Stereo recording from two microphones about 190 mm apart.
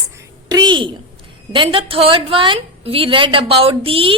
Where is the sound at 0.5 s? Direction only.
25° right (ahead or behind).